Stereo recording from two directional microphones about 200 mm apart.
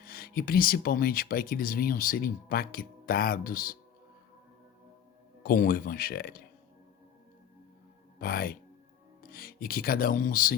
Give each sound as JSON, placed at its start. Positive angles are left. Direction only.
{"t": 0.0, "sound": "speech", "side_deg": 50}
{"t": 5.4, "sound": "speech", "side_deg": 45}
{"t": 8.2, "sound": "speech", "side_deg": 50}